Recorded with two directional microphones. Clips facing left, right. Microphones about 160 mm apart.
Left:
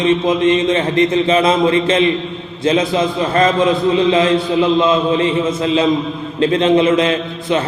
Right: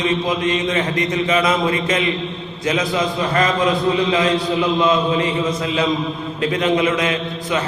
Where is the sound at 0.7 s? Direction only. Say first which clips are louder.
Left 6 dB; 30° left (ahead or behind).